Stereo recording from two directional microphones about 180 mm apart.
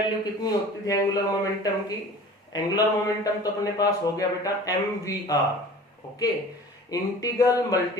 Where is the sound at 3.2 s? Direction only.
20° left (ahead or behind).